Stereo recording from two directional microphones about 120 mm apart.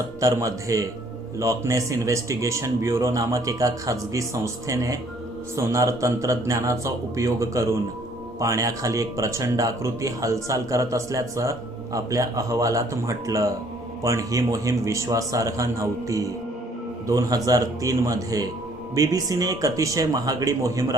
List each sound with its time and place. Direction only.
0.2 s speech: 25° right (ahead or behind)